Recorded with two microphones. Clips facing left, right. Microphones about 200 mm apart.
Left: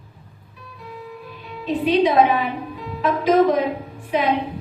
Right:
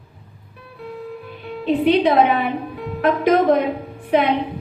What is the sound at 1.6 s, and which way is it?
A woman's voice, 60° right (ahead or behind).